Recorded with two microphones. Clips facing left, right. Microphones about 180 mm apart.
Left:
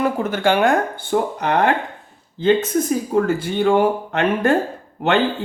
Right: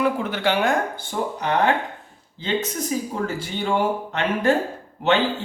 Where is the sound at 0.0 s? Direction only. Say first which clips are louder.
Left 3 dB; 45° left (ahead or behind).